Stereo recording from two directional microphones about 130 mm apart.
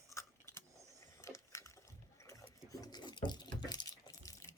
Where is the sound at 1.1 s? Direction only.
20° left (ahead or behind).